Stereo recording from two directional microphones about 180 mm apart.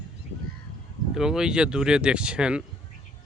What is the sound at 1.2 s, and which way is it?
Speech, 5° right (ahead or behind).